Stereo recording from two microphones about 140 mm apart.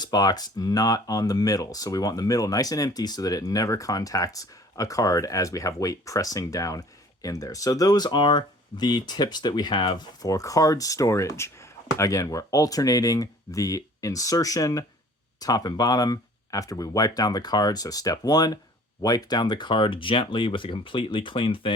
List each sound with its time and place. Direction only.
0.0 s speech: 25° left (ahead or behind)